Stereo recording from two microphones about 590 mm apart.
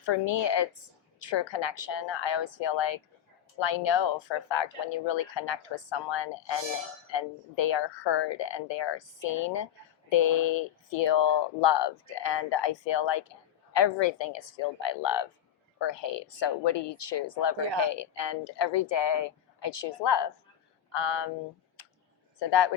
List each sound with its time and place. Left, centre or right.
0.0 s a woman's voice: left
22.4 s a woman's voice: left